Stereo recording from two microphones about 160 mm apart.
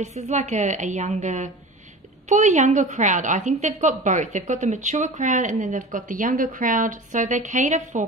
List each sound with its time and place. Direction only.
0.0 s a woman's voice: 45° right (ahead or behind)